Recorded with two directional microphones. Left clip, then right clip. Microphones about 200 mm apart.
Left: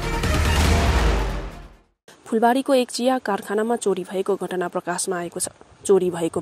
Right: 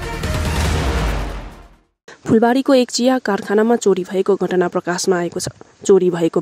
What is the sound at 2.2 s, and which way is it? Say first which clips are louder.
Speech: right 5 dB; 45° right (ahead or behind).